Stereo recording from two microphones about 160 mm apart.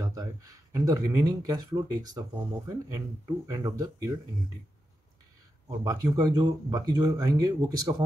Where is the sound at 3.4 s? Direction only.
20° right (ahead or behind).